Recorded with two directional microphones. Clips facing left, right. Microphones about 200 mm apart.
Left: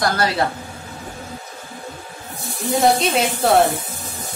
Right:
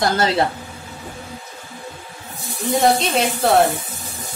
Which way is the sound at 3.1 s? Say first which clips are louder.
Even; centre (ahead or behind).